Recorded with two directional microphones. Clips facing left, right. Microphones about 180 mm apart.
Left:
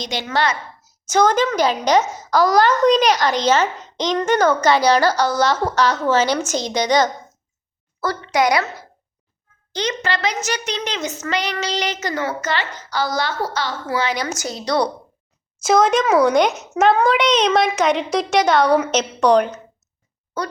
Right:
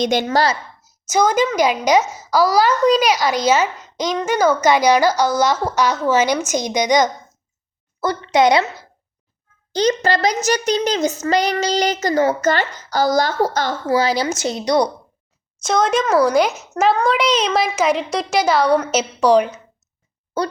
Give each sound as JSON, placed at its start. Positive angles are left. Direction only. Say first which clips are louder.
{"t": 0.0, "sound": "a woman's voice", "louder": "right 9 dB", "side_deg": -50}
{"t": 0.3, "sound": "a child's voice", "louder": "right 3 dB", "side_deg": -30}
{"t": 1.0, "sound": "speech", "louder": "even", "side_deg": -10}
{"t": 8.0, "sound": "speech", "louder": "right 3 dB", "side_deg": -25}
{"t": 9.7, "sound": "a child's voice", "louder": "right 6 dB", "side_deg": -40}
{"t": 15.6, "sound": "a child's voice", "louder": "left 2 dB", "side_deg": 0}